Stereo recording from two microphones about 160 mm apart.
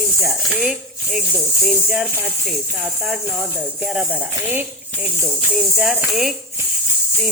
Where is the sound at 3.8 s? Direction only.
5° right (ahead or behind).